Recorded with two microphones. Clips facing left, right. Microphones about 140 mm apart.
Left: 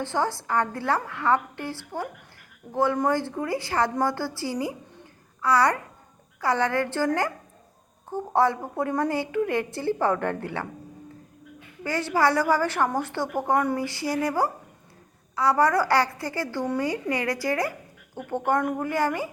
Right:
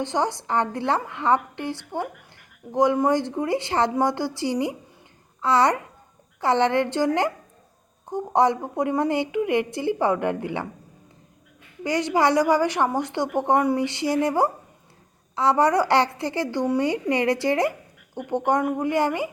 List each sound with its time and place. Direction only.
0.0 s a woman's voice: 20° right (ahead or behind)
11.8 s a woman's voice: 20° right (ahead or behind)